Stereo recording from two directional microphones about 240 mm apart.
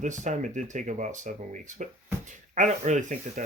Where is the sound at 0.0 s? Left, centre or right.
Right.